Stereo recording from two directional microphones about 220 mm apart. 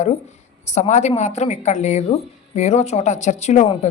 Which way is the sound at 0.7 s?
30° left (ahead or behind).